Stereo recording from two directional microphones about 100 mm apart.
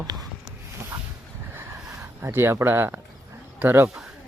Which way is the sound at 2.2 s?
25° right (ahead or behind).